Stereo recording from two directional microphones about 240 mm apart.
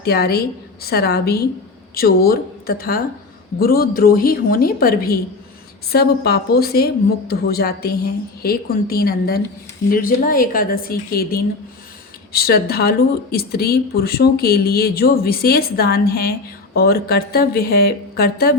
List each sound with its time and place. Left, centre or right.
0.0 s speech: left